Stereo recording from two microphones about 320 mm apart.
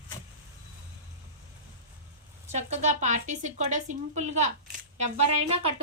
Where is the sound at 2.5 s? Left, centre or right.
Right.